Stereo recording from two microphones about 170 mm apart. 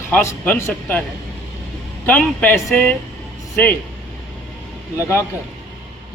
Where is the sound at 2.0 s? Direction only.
10° left (ahead or behind).